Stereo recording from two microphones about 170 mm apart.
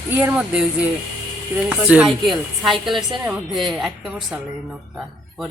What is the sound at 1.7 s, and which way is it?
A woman's voice, 5° right (ahead or behind).